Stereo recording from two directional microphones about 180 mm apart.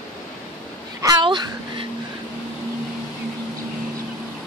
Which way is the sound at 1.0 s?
25° right (ahead or behind).